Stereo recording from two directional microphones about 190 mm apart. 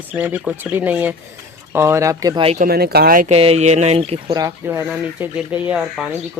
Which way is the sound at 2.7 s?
55° right (ahead or behind).